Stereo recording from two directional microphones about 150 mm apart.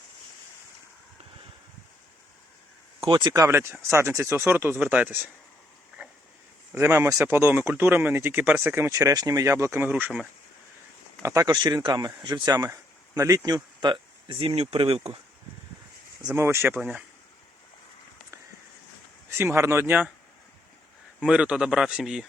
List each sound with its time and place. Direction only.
3.0 s speech: 30° right (ahead or behind); by 5.3 s 10° right (ahead or behind)
6.0 s a sound: 10° right (ahead or behind)
6.7 s speech: 15° right (ahead or behind)
11.2 s speech: 20° right (ahead or behind); by 15.2 s 40° right (ahead or behind)
16.3 s speech: 15° right (ahead or behind)
19.4 s speech: 15° right (ahead or behind)
21.2 s speech: 5° right (ahead or behind)